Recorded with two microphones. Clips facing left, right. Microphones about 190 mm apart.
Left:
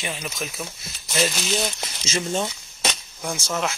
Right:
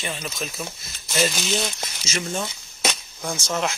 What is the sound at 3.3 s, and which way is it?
Speech, 5° left (ahead or behind).